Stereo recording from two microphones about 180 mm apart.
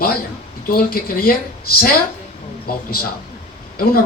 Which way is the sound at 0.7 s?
55° left (ahead or behind).